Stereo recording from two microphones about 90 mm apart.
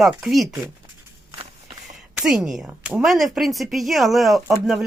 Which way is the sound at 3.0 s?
Centre (ahead or behind).